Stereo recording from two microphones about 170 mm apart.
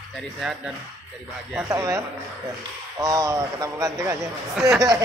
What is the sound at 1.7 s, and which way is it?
Speech, 15° right (ahead or behind).